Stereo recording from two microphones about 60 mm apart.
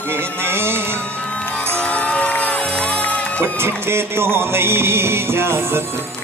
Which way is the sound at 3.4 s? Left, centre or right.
Right.